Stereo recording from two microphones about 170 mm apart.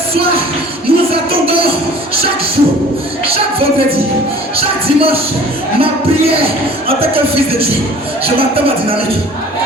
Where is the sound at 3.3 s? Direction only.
35° right (ahead or behind).